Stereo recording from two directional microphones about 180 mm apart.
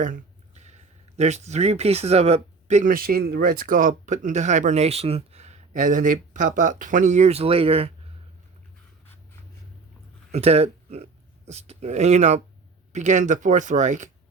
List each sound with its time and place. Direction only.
0.0 s speech: 45° right (ahead or behind)
10.3 s speech: 35° right (ahead or behind)